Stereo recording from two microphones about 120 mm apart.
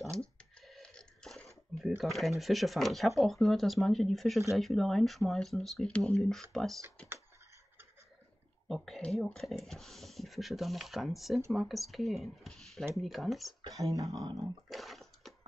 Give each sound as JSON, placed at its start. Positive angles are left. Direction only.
{"t": 0.6, "sound": "a sound", "side_deg": 5}
{"t": 2.0, "sound": "speech", "side_deg": 0}
{"t": 8.6, "sound": "speech", "side_deg": 0}
{"t": 13.7, "sound": "speech", "side_deg": -30}
{"t": 14.7, "sound": "bathtub", "side_deg": 0}